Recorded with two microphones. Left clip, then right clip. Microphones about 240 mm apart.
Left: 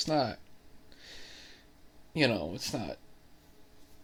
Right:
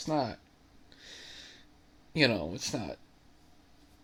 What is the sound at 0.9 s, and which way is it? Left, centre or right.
Snort, centre.